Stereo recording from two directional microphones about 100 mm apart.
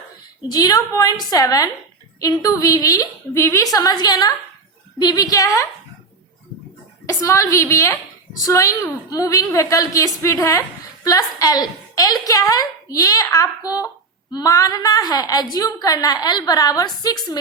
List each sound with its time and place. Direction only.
0.4 s a woman's voice: 40° left (ahead or behind)
7.1 s a woman's voice: 30° left (ahead or behind)